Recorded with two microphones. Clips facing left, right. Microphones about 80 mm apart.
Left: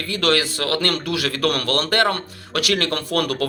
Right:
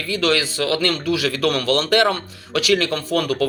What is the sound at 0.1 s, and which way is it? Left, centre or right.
Speech, left.